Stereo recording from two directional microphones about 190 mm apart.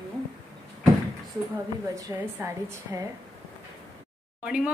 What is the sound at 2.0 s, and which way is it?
A woman's voice, 15° right (ahead or behind).